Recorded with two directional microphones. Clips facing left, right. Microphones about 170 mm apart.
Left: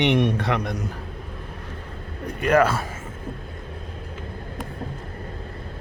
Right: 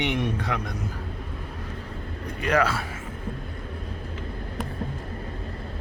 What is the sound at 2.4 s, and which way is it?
Speech, 50° left (ahead or behind).